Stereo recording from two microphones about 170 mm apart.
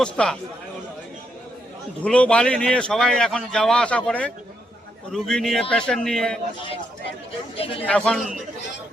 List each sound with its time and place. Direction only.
0.0 s a man's voice: 5° left (ahead or behind)
2.0 s a man's voice: 5° left (ahead or behind)
7.5 s speech: 35° left (ahead or behind)
7.9 s a man's voice: 5° left (ahead or behind)